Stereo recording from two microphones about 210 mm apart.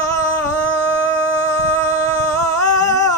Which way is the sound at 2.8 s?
15° left (ahead or behind).